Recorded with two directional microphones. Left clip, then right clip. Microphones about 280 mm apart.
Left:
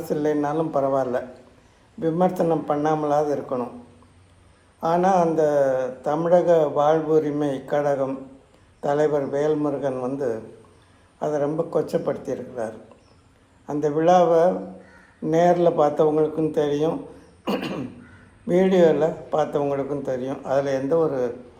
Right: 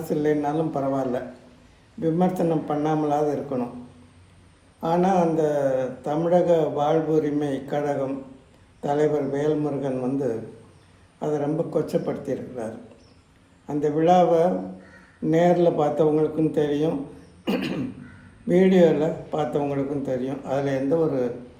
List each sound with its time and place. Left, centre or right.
0.0 s a man's voice: centre
4.8 s a man's voice: centre
17.4 s cough: centre
18.4 s a man's voice: centre